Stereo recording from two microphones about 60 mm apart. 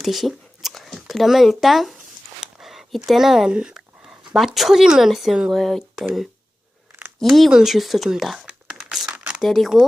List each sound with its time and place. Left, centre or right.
0.0 s a sound: centre
0.9 s speech: centre
2.4 s a sound: centre
3.1 s speech: centre
3.5 s a sound: centre
4.4 s speech: centre
7.3 s speech: centre
8.8 s crumpling: centre
9.4 s speech: centre